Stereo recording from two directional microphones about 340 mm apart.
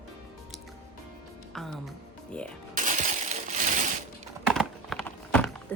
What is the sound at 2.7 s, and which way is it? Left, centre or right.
Crushing, right.